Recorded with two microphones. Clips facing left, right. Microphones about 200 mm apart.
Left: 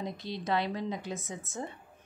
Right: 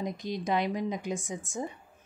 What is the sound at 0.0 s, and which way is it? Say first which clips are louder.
A woman's voice: right 3 dB; 15° right (ahead or behind).